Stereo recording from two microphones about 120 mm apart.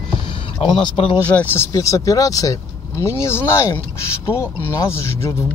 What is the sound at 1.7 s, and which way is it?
Speech, 30° left (ahead or behind).